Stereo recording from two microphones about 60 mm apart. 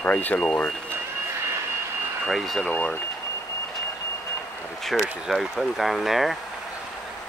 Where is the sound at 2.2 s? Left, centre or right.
Centre.